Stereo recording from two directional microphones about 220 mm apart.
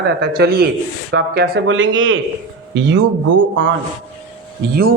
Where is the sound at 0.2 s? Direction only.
45° right (ahead or behind).